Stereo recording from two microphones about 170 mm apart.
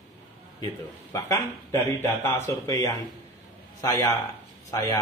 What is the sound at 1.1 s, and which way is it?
Speech, 15° left (ahead or behind).